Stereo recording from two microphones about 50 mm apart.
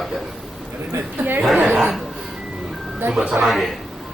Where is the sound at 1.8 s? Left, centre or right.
Centre.